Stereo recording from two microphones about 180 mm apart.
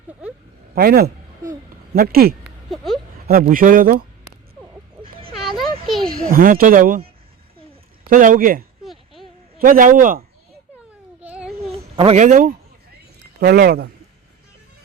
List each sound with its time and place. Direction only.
0.1 s speech: 5° right (ahead or behind)
0.8 s a man's voice: 55° right (ahead or behind)
2.4 s a sound: centre (ahead or behind)
3.5 s speech: 50° right (ahead or behind)
5.3 s a sound: centre (ahead or behind)
5.9 s a child's voice: centre (ahead or behind)
6.1 s speech: 50° right (ahead or behind)
8.1 s speech: 50° right (ahead or behind)
8.8 s a sound: centre (ahead or behind)
9.6 s speech: 50° right (ahead or behind)
11.2 s baby cry: 5° right (ahead or behind)
11.6 s a sound: 35° right (ahead or behind)
13.4 s a man's voice: 60° right (ahead or behind)